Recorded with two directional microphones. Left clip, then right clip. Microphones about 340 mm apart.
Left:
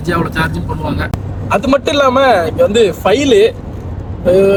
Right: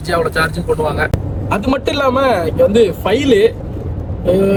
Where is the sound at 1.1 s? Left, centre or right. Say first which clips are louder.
Left 4 dB; centre.